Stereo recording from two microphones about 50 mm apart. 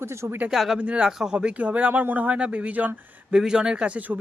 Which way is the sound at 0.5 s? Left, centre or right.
Centre.